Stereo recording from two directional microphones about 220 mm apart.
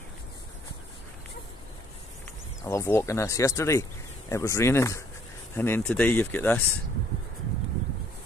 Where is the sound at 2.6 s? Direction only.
15° left (ahead or behind).